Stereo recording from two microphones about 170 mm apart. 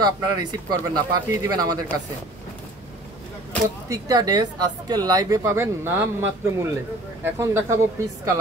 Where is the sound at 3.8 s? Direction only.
20° right (ahead or behind).